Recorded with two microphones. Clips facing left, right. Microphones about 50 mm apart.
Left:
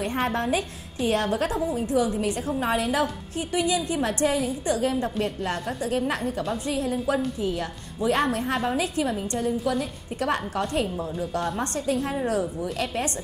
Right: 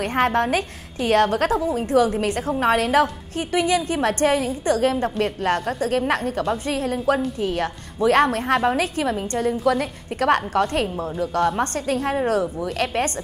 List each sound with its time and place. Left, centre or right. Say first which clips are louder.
0.0 s a woman's voice: right 6 dB; right
8.8 s a woman's voice: right 3 dB; right
9.4 s a woman's voice: right 6 dB; right